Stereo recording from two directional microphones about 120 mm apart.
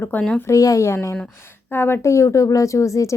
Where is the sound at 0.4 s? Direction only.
25° left (ahead or behind).